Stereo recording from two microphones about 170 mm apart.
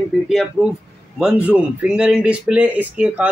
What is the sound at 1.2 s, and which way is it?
Speech, 5° right (ahead or behind).